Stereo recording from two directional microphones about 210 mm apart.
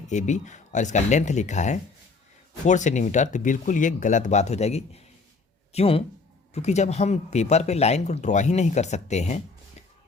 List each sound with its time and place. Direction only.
0.1 s speech: 35° left (ahead or behind)